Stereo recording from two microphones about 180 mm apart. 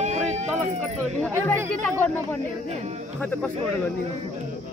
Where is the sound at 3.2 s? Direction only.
10° left (ahead or behind).